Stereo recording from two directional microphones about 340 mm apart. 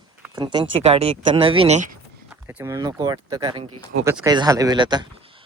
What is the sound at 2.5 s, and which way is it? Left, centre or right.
Speech, centre.